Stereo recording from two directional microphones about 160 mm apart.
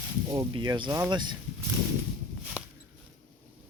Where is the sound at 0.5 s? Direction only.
30° right (ahead or behind).